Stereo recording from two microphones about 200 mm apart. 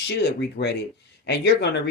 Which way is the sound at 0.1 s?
60° left (ahead or behind).